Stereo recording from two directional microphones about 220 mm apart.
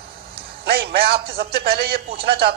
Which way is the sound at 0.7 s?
45° right (ahead or behind).